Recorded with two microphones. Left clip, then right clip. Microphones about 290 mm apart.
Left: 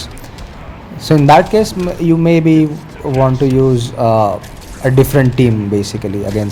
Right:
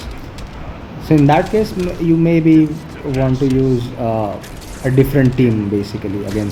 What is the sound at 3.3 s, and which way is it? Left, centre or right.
Speech, centre.